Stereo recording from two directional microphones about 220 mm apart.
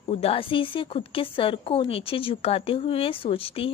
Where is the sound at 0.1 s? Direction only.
25° left (ahead or behind).